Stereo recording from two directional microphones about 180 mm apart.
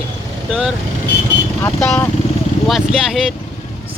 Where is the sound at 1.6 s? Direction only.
10° left (ahead or behind).